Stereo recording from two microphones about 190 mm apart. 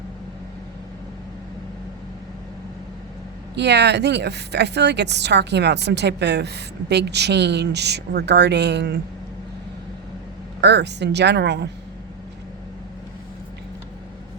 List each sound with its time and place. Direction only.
3.5 s speech: 60° right (ahead or behind)
10.6 s speech: 65° right (ahead or behind)